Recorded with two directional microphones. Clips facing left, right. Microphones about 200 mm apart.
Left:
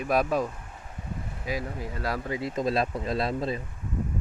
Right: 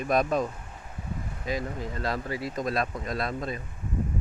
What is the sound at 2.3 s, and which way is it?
Speech, 25° left (ahead or behind).